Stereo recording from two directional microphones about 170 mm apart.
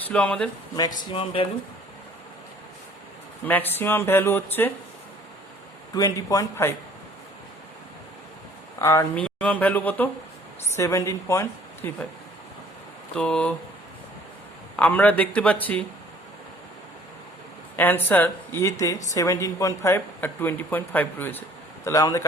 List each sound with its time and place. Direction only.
0.1 s speech: 5° left (ahead or behind)
1.1 s speech: 35° left (ahead or behind)
3.4 s speech: 10° left (ahead or behind)
5.9 s a man's voice: 20° left (ahead or behind)
8.8 s speech: 15° left (ahead or behind)
13.1 s speech: 5° left (ahead or behind)
14.8 s speech: 10° left (ahead or behind)
17.7 s a man's voice: 10° left (ahead or behind)